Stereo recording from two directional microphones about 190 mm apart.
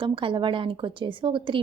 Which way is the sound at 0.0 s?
25° right (ahead or behind).